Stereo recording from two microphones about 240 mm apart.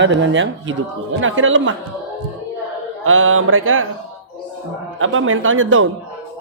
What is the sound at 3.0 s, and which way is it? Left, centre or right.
Speech, right.